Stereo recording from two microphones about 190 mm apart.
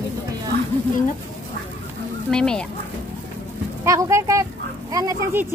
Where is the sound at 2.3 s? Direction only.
5° left (ahead or behind).